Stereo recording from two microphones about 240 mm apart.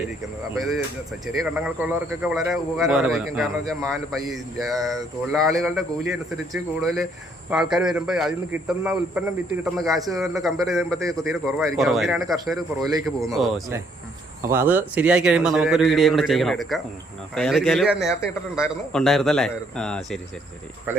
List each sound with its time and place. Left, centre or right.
1.5 s speech: centre